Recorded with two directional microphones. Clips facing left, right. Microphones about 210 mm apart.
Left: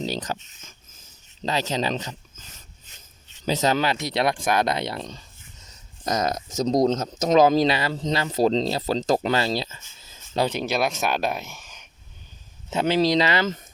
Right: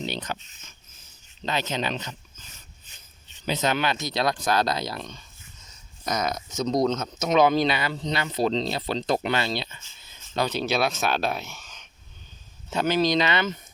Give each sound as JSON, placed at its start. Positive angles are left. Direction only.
{"t": 0.0, "sound": "speech", "side_deg": 35}
{"t": 3.4, "sound": "speech", "side_deg": 35}
{"t": 10.6, "sound": "speech", "side_deg": 15}
{"t": 12.7, "sound": "speech", "side_deg": 25}